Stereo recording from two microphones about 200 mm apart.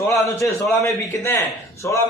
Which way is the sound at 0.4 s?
15° left (ahead or behind).